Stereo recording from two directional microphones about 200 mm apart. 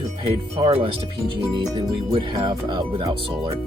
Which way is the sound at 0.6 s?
25° right (ahead or behind).